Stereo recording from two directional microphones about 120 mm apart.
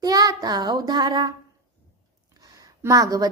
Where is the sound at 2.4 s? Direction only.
30° right (ahead or behind).